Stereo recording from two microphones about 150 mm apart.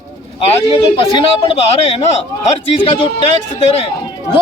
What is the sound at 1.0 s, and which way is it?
Speech, 40° left (ahead or behind).